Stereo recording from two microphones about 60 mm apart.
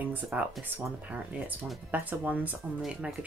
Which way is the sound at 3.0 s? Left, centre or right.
Centre.